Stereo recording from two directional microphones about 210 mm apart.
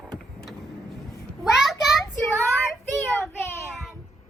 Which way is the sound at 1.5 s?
Centre (ahead or behind).